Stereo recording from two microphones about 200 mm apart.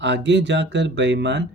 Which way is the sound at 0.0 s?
60° right (ahead or behind).